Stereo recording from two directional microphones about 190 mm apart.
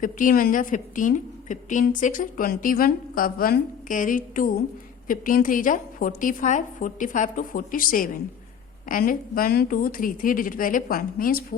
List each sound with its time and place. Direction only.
0.0 s a woman's voice: 45° left (ahead or behind)